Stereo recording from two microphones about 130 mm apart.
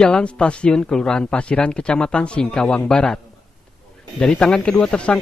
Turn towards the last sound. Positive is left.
turn(degrees=5)  # may be behind; listen again after turning